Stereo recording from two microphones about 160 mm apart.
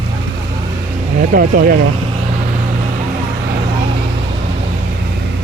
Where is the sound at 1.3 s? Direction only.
65° right (ahead or behind).